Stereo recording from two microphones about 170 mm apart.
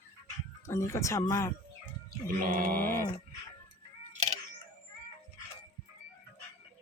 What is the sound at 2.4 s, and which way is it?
Mantra, 60° right (ahead or behind).